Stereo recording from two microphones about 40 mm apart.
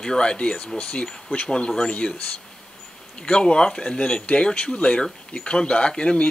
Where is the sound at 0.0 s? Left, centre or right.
Left.